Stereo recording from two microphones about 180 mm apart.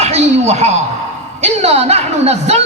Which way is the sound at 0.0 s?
35° right (ahead or behind).